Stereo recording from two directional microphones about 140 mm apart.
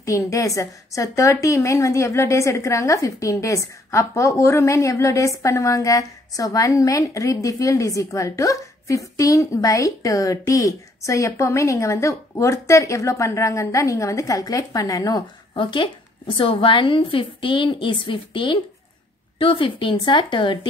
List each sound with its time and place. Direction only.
0.0 s a woman's voice: 20° left (ahead or behind)
15.5 s a woman's voice: 35° left (ahead or behind)